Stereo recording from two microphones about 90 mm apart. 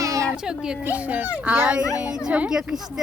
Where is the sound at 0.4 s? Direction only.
10° right (ahead or behind).